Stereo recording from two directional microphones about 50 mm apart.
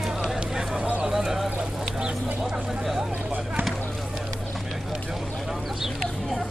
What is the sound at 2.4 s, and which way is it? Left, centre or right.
Speech, centre.